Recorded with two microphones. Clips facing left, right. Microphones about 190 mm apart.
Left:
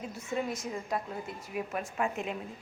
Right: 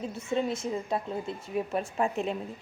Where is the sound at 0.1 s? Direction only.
25° right (ahead or behind).